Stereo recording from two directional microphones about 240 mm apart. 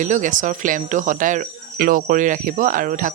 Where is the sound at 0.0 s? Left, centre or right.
Right.